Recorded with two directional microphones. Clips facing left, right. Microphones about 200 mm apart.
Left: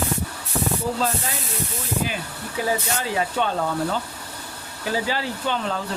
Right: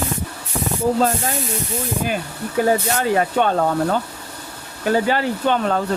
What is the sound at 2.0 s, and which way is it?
Speech, 50° right (ahead or behind).